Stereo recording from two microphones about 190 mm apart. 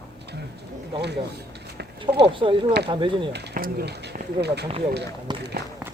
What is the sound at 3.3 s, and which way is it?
Speech, 55° right (ahead or behind).